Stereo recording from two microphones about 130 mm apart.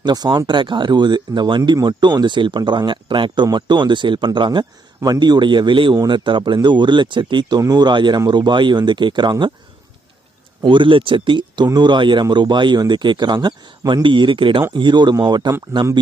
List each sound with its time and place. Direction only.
0.0 s speech: 35° right (ahead or behind)
10.6 s speech: 40° right (ahead or behind)